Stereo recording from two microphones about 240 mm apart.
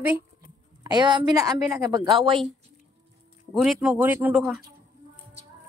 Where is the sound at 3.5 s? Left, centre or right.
Centre.